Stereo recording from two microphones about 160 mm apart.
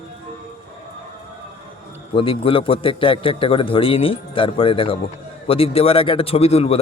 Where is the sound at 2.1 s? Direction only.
35° left (ahead or behind).